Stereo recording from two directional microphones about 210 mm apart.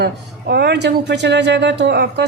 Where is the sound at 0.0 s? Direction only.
50° right (ahead or behind).